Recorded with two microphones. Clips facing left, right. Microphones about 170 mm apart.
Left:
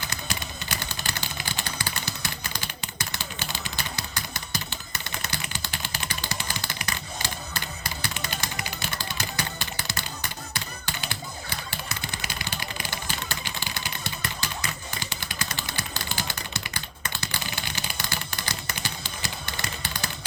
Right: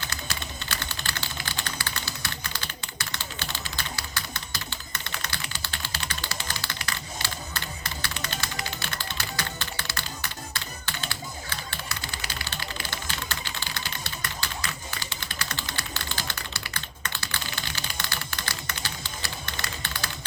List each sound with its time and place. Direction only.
0.1 s typing: 20° left (ahead or behind)
9.1 s music: 15° left (ahead or behind)
12.7 s a sound: 15° left (ahead or behind)
16.7 s typing: 15° left (ahead or behind)